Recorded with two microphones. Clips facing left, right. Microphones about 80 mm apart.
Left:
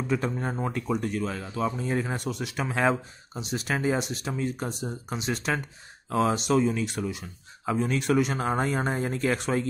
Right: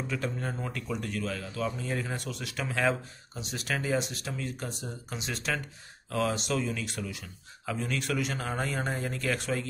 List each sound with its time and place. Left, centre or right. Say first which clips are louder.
0.1 s speech: left 8 dB; left